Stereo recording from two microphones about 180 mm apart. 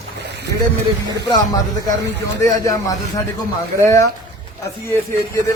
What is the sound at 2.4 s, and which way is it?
Speech, 20° left (ahead or behind).